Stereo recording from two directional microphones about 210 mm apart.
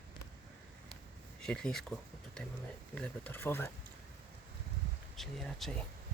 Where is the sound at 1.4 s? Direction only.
5° left (ahead or behind).